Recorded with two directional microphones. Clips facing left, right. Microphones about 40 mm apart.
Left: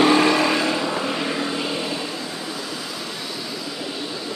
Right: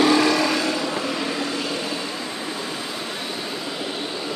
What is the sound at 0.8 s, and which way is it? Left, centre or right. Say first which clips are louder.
Vehicle: left 1 dB; centre.